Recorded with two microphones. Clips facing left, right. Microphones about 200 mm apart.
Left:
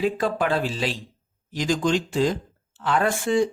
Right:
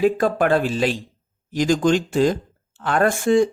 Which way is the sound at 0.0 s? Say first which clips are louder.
Right 5 dB; 50° right (ahead or behind).